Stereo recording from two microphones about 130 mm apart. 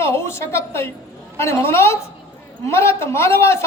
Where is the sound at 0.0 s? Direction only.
20° left (ahead or behind).